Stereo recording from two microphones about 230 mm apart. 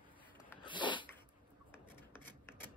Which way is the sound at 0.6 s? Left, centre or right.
Left.